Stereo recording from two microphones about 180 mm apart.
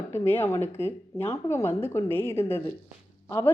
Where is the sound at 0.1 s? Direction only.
15° left (ahead or behind).